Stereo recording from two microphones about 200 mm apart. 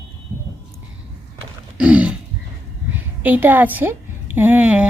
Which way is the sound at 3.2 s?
10° right (ahead or behind).